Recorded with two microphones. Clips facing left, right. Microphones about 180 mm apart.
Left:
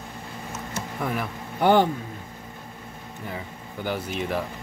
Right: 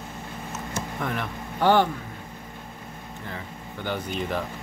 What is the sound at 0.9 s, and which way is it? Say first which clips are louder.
Speech: left 3 dB; 5° left (ahead or behind).